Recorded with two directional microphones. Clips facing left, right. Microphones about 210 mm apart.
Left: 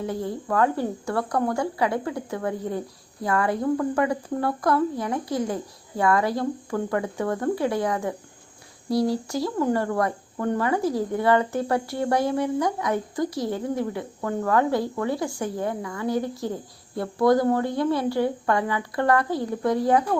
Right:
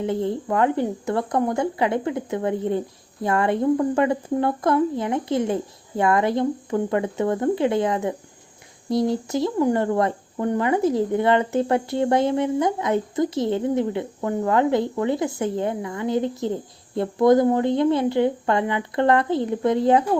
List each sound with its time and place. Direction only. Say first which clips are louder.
0.0 s speech: right 5 dB; 25° right (ahead or behind)